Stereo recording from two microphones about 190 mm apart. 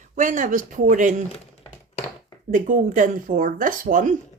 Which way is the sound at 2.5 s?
45° right (ahead or behind).